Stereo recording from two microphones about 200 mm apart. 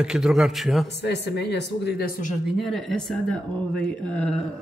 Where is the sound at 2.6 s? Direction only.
Centre (ahead or behind).